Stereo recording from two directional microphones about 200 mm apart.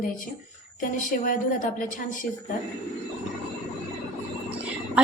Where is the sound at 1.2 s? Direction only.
45° left (ahead or behind).